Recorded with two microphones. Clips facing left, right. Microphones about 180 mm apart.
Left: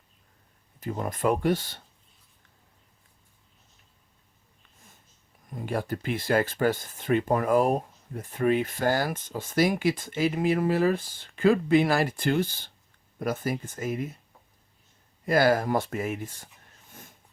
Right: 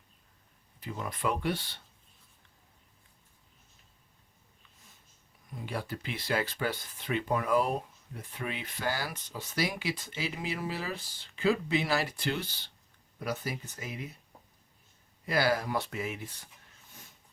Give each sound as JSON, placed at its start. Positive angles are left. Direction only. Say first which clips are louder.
{"t": 0.8, "sound": "speech", "louder": "left 7 dB", "side_deg": 45}
{"t": 5.5, "sound": "speech", "louder": "left 7 dB", "side_deg": 50}
{"t": 15.3, "sound": "speech", "louder": "left 7 dB", "side_deg": 50}
{"t": 16.9, "sound": "wheeze", "louder": "left 6 dB", "side_deg": 50}